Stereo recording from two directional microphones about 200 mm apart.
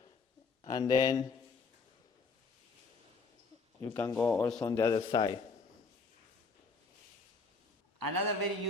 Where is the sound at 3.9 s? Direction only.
10° left (ahead or behind).